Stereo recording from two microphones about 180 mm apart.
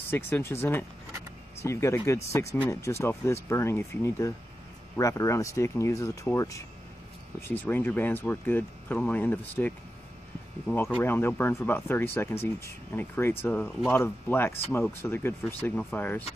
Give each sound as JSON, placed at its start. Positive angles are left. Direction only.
{"t": 0.0, "sound": "speech", "side_deg": 15}